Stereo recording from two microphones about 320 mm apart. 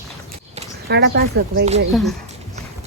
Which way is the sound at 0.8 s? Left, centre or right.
Right.